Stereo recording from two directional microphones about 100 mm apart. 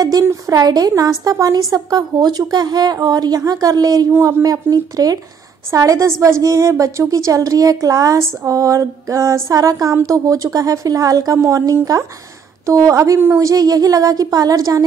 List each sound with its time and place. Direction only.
0.2 s a woman's voice: 35° right (ahead or behind)